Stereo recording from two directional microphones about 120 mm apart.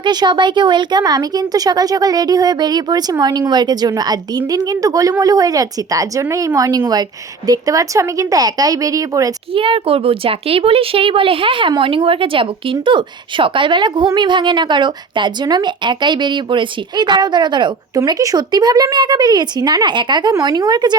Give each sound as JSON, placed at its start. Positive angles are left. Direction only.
{"t": 0.0, "sound": "speech", "side_deg": -40}
{"t": 9.5, "sound": "speech", "side_deg": -50}
{"t": 18.0, "sound": "speech", "side_deg": -30}